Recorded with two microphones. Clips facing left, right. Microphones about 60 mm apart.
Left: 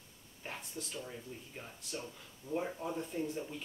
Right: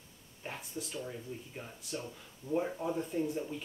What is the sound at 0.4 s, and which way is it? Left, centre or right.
Speech, centre.